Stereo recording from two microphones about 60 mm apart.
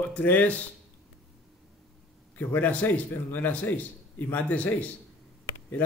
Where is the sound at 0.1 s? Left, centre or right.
Left.